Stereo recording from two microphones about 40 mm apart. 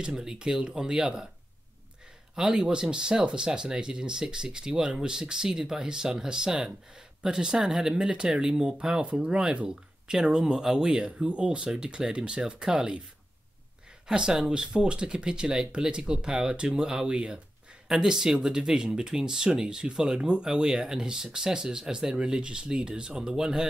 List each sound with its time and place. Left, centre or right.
0.2 s speech: centre
2.3 s speech: centre
14.0 s speech: centre